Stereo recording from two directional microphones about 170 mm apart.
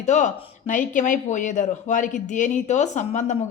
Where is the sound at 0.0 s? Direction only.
45° left (ahead or behind).